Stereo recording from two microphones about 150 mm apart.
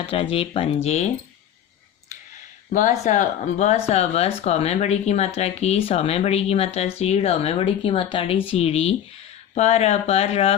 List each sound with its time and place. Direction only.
0.0 s speech: 40° left (ahead or behind)
3.0 s speech: 55° left (ahead or behind)